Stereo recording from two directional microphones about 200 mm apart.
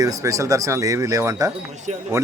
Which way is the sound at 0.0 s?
15° right (ahead or behind).